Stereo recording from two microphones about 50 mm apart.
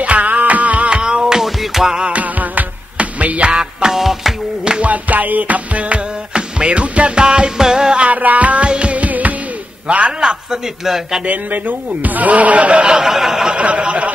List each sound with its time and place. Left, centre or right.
0.0 s music: right
0.8 s music: centre
2.0 s music: right
3.9 s music: centre
4.6 s music: right
8.1 s a man's voice: right
8.6 s music: right
9.8 s a man's voice: right
10.5 s a man's voice: centre
11.2 s a man's voice: right; by 13.6 s centre
13.6 s a man's voice: right